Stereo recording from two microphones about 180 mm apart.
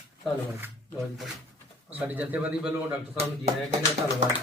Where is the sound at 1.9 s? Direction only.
10° right (ahead or behind).